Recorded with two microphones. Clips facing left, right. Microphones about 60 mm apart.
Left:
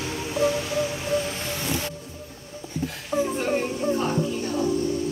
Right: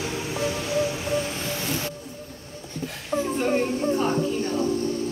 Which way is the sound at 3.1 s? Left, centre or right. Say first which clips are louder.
Left 1 dB; centre.